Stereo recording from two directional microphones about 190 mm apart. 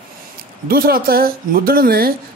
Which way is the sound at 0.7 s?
50° right (ahead or behind).